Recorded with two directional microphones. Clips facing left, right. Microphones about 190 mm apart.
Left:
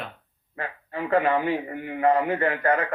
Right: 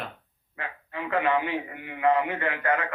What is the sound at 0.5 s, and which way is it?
A man's voice, 40° left (ahead or behind).